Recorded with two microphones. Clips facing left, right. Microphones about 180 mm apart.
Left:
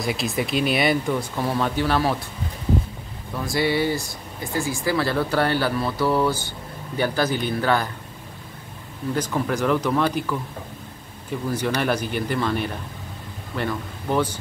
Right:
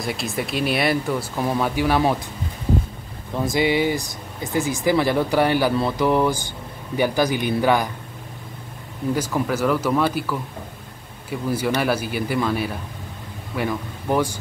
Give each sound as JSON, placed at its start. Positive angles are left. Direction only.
{"t": 0.0, "sound": "speech", "side_deg": 0}
{"t": 3.3, "sound": "speech", "side_deg": -20}
{"t": 9.1, "sound": "speech", "side_deg": -5}
{"t": 11.2, "sound": "speech", "side_deg": -10}